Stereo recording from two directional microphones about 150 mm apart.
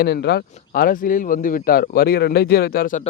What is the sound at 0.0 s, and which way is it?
Speech, 90° left.